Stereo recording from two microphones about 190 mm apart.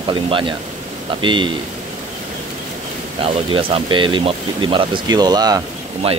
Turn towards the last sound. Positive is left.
turn(degrees=-20)  # may be behind; listen again after turning